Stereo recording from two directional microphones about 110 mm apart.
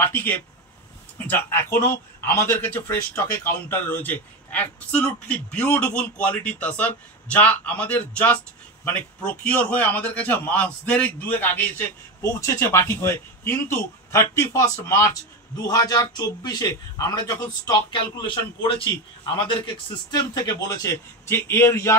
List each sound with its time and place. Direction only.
0.0 s a man's voice: 15° left (ahead or behind)